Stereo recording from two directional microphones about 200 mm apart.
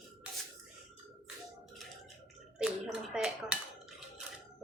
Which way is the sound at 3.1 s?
5° right (ahead or behind).